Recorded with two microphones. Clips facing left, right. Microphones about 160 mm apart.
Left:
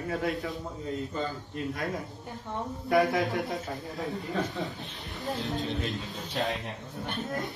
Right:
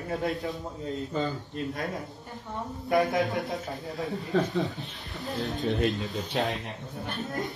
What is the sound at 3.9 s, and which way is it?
Speech, centre (ahead or behind).